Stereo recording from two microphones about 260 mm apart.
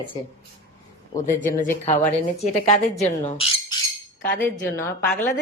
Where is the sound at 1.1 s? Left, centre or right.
Left.